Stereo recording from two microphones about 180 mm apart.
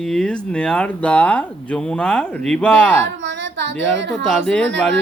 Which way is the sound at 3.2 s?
80° right.